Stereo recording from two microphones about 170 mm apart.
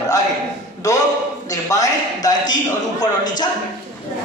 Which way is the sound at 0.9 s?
20° left (ahead or behind).